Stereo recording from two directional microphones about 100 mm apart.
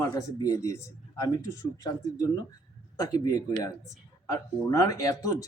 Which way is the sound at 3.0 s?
35° left (ahead or behind).